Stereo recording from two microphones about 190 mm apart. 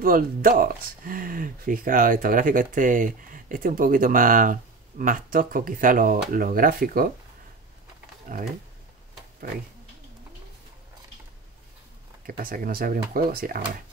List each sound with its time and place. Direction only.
0.0 s speech: 50° right (ahead or behind)
12.3 s speech: 50° right (ahead or behind)